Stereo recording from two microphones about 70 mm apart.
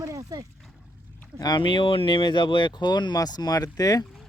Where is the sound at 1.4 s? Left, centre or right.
Left.